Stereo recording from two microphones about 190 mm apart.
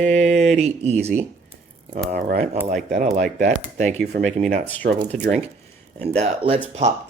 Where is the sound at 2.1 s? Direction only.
50° right (ahead or behind).